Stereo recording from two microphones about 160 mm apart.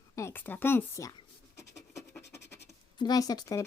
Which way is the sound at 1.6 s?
15° left (ahead or behind).